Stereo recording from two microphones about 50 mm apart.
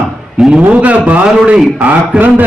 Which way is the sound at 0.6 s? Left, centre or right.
Right.